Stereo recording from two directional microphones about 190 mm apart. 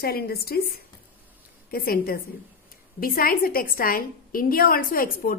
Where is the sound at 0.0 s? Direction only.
55° left (ahead or behind).